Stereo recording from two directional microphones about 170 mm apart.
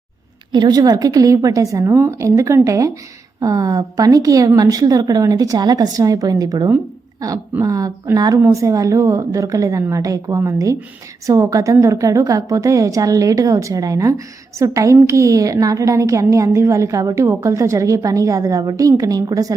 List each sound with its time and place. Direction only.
0.5 s a woman's voice: 25° right (ahead or behind)